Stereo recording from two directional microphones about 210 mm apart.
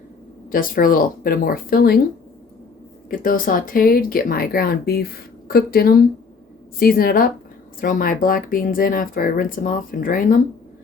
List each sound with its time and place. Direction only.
0.5 s speech: 40° left (ahead or behind)
3.1 s speech: 40° left (ahead or behind)